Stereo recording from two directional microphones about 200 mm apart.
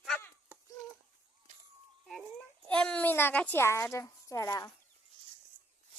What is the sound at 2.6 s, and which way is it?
Speech, 5° left (ahead or behind).